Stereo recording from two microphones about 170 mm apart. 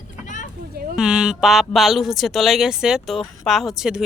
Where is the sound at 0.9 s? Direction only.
5° right (ahead or behind).